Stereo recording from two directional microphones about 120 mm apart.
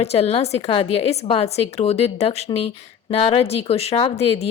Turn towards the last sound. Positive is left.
turn(degrees=60)  # may be behind; listen again after turning